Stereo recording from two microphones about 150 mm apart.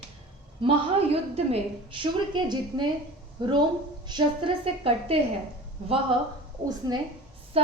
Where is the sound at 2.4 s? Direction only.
30° right (ahead or behind).